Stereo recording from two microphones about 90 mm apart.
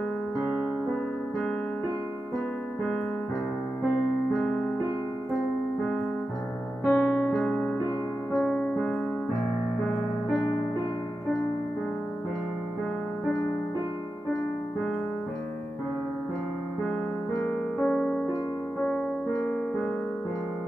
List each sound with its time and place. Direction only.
6.8 s keyboard: 20° left (ahead or behind)
8.5 s music: 15° left (ahead or behind)
17.4 s music: 20° left (ahead or behind)